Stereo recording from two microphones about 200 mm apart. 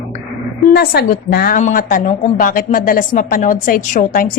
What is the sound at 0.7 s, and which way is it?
A woman's voice, 55° left (ahead or behind).